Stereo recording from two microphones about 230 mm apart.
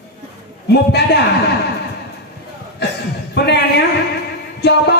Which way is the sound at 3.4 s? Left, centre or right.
Left.